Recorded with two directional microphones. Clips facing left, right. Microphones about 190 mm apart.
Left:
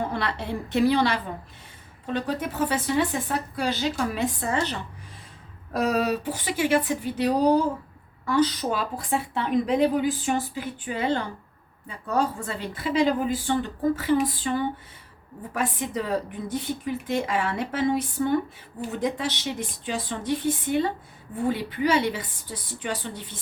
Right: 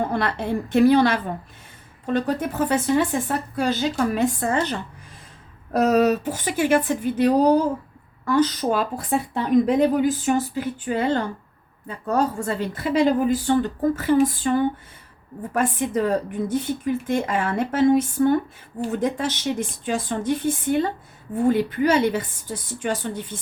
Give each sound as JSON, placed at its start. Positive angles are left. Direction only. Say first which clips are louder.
{"t": 0.1, "sound": "a woman's voice", "louder": "right 5 dB", "side_deg": -50}
{"t": 5.7, "sound": "a woman's voice", "louder": "right 6 dB", "side_deg": -45}